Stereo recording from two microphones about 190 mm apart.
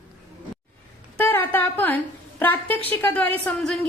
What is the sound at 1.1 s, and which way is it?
A woman's voice, 10° left (ahead or behind).